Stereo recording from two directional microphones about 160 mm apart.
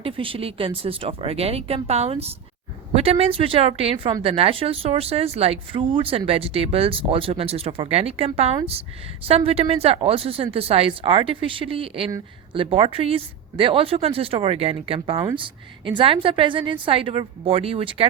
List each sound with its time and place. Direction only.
0.0 s speech: 35° right (ahead or behind)